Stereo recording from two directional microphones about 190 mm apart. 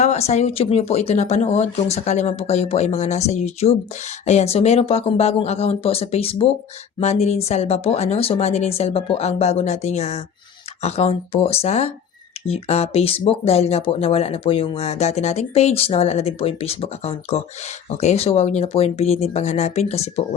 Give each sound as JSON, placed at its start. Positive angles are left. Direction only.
{"t": 0.0, "sound": "speech", "side_deg": 35}